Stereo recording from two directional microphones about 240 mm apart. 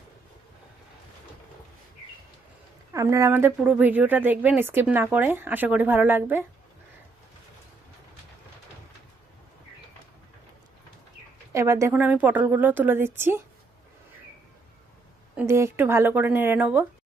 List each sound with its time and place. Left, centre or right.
2.9 s a woman's voice: centre
11.5 s a woman's voice: centre
15.4 s a woman's voice: centre